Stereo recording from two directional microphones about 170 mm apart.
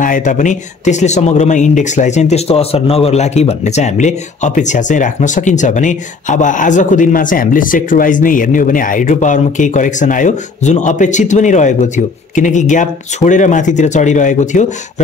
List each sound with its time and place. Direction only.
0.0 s speech: 50° left (ahead or behind)